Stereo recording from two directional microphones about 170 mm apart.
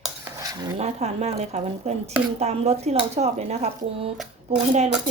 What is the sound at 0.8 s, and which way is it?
Speech, 40° right (ahead or behind).